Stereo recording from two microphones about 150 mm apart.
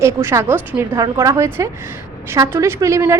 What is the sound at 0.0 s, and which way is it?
A woman's voice, 15° right (ahead or behind).